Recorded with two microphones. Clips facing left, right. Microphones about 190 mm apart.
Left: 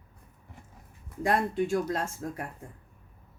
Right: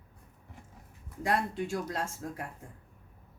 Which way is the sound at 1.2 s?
50° left (ahead or behind).